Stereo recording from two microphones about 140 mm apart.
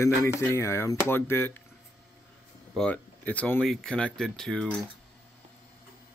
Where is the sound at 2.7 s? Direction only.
10° left (ahead or behind).